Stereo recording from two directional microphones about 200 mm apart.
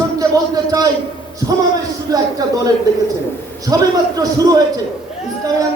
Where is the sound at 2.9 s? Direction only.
20° right (ahead or behind).